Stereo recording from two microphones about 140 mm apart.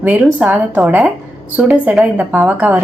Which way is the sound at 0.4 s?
10° right (ahead or behind).